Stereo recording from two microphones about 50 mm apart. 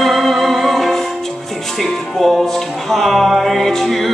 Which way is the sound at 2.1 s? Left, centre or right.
Centre.